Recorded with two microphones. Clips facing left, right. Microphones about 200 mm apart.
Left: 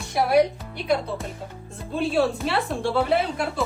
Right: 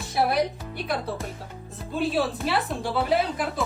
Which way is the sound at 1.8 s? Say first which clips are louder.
Left 3 dB; centre (ahead or behind).